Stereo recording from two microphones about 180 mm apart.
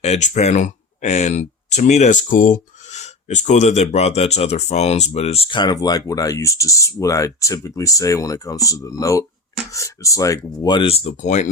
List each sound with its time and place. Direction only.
0.0 s speech: 40° left (ahead or behind)